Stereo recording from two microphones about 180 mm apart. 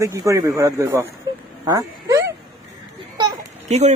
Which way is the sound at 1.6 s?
20° right (ahead or behind).